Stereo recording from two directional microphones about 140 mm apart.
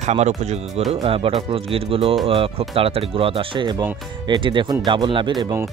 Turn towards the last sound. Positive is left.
turn(degrees=-35)  # may be behind; listen again after turning